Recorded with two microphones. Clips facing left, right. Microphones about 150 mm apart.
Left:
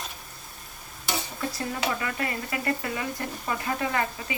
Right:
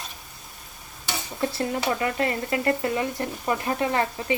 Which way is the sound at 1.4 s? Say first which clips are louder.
Right 8 dB; 30° right (ahead or behind).